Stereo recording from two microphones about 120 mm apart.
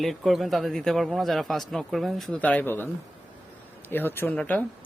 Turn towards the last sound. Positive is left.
turn(degrees=15)  # may be behind; listen again after turning